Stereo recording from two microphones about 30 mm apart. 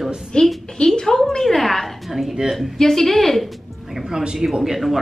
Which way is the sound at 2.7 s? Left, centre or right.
Centre.